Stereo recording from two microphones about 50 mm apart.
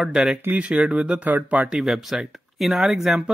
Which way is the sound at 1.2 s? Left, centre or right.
Right.